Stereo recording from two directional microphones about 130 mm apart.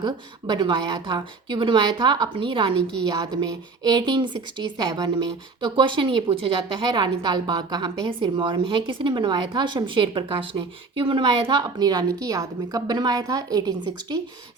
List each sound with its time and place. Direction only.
0.0 s speech: 35° right (ahead or behind)